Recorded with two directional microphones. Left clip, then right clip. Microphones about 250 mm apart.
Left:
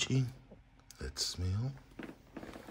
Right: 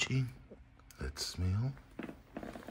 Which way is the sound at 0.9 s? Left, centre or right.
Centre.